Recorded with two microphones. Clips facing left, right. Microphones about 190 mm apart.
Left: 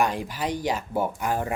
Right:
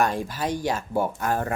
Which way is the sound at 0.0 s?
15° left (ahead or behind).